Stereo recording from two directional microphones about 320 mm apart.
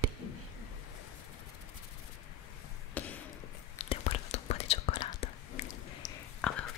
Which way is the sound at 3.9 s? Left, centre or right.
Centre.